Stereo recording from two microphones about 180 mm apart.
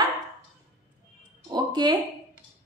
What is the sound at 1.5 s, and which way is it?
Speech, 25° right (ahead or behind).